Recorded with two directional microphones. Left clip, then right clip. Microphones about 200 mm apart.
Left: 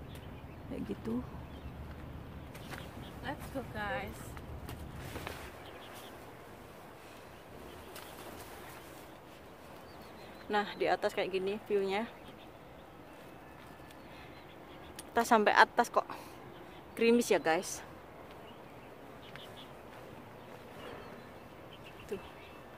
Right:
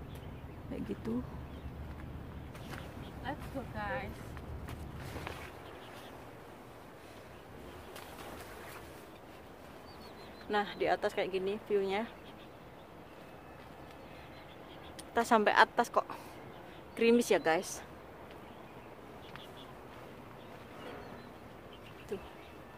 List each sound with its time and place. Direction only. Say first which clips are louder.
0.7 s speech: even; centre (ahead or behind)
3.3 s speech: even; 40° left (ahead or behind)
10.5 s speech: even; 10° left (ahead or behind)
15.1 s speech: left 1 dB; 15° left (ahead or behind)